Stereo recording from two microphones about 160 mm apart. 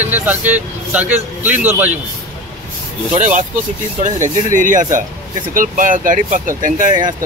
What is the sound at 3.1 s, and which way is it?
Speech, 50° right (ahead or behind).